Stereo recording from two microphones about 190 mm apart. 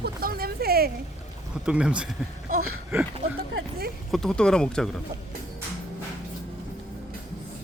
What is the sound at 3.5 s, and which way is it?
Speech, 55° right (ahead or behind).